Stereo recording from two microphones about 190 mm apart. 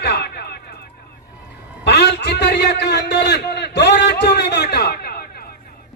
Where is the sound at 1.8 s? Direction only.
60° left (ahead or behind).